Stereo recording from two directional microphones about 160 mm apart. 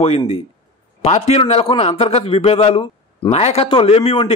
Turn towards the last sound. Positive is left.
turn(degrees=35)  # may be behind; listen again after turning